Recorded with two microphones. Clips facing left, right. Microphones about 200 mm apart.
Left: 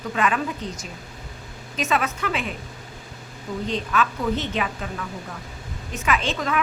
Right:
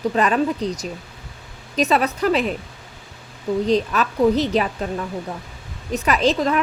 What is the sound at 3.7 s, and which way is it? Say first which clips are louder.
A woman's voice: right 2 dB; 35° right (ahead or behind).